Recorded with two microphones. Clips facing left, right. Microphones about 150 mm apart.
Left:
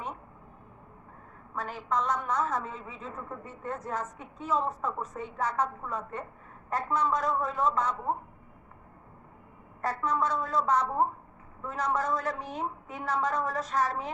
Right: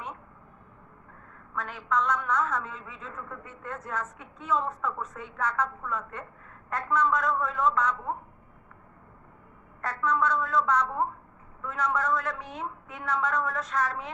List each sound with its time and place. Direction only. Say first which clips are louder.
1.5 s a woman's voice: right 1 dB; 35° left (ahead or behind)
9.8 s a woman's voice: right 2 dB; 35° left (ahead or behind)